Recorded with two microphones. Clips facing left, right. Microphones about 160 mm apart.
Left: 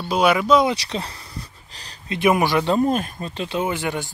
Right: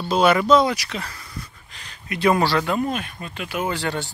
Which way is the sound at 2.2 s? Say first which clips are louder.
Left 1 dB; 20° left (ahead or behind).